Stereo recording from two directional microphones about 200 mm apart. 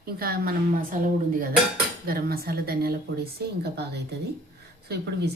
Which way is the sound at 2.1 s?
50° right (ahead or behind).